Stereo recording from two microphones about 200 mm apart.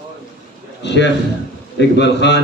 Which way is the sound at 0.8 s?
60° left (ahead or behind).